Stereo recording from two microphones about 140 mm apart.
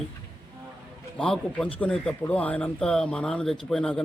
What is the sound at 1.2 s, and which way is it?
A man's voice, 5° left (ahead or behind).